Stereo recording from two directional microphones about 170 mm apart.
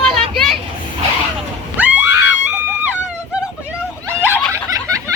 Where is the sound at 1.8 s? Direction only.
10° right (ahead or behind).